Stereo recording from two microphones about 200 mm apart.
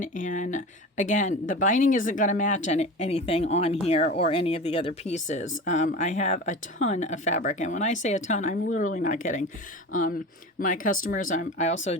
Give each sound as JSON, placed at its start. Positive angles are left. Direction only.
{"t": 0.0, "sound": "speech", "side_deg": 40}